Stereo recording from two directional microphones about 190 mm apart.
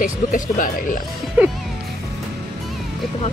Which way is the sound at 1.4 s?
5° right (ahead or behind).